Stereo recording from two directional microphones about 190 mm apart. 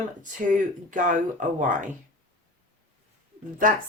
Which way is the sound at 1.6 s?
40° right (ahead or behind).